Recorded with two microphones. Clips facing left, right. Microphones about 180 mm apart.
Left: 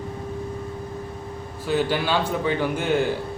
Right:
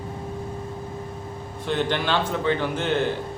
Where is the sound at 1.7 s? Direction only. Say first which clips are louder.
Left 2 dB; 5° left (ahead or behind).